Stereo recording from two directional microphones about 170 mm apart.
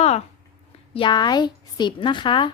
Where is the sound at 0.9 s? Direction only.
30° left (ahead or behind).